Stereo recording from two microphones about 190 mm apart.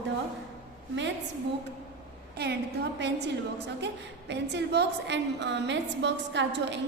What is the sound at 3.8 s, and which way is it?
A woman's voice, 65° right (ahead or behind).